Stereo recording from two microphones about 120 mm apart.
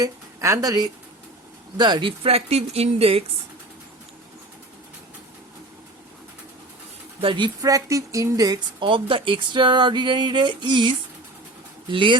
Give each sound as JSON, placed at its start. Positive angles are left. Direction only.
{"t": 0.0, "sound": "a woman's voice", "side_deg": -25}
{"t": 1.8, "sound": "speech", "side_deg": -40}
{"t": 7.2, "sound": "speech", "side_deg": -45}
{"t": 7.6, "sound": "speech", "side_deg": -30}
{"t": 8.8, "sound": "speech", "side_deg": -45}